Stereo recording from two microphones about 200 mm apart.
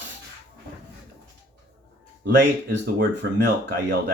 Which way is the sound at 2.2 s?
60° right (ahead or behind).